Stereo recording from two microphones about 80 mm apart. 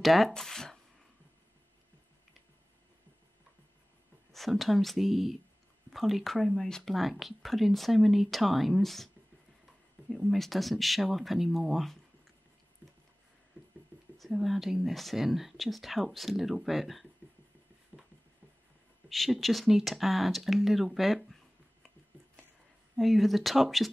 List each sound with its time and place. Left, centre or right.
0.0 s speech: centre
4.3 s speech: centre
13.5 s a sound: right
14.1 s speech: centre
17.9 s a sound: centre
19.0 s speech: centre
22.9 s speech: centre